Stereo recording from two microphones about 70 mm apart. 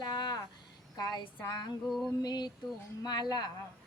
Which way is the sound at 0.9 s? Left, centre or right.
Left.